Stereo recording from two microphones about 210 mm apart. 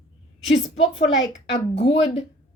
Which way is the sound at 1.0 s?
60° left (ahead or behind).